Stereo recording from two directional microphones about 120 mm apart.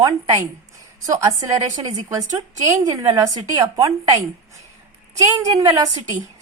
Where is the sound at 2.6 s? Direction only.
30° right (ahead or behind).